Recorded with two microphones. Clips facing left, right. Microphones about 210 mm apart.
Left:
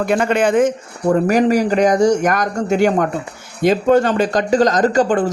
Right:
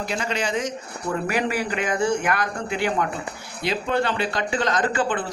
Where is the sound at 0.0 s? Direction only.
55° left (ahead or behind).